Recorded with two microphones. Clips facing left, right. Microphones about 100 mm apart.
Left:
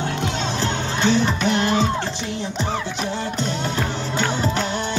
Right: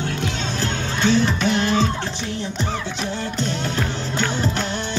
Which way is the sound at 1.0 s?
10° left (ahead or behind).